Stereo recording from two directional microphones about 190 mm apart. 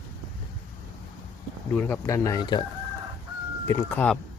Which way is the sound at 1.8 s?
15° left (ahead or behind).